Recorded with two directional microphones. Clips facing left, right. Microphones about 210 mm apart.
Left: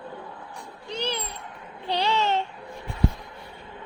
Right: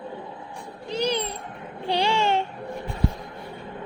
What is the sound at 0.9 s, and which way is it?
A woman's voice, 15° right (ahead or behind).